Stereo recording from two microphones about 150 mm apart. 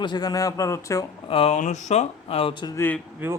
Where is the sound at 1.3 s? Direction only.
45° left (ahead or behind).